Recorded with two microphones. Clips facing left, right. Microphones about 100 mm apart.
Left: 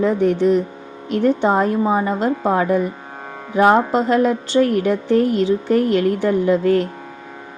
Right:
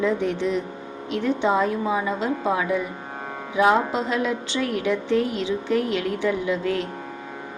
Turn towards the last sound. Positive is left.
turn(degrees=50)  # may be behind; listen again after turning